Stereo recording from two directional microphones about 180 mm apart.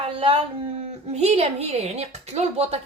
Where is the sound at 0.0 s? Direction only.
30° right (ahead or behind).